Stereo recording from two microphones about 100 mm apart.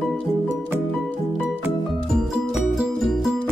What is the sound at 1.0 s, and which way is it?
Music, 15° left (ahead or behind).